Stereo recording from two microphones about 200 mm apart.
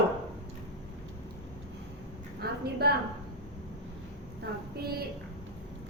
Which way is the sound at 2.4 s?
50° right (ahead or behind).